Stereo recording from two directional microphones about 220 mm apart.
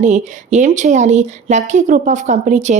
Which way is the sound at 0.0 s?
35° right (ahead or behind).